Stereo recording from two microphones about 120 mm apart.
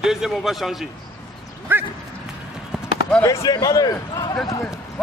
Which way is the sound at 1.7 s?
15° right (ahead or behind).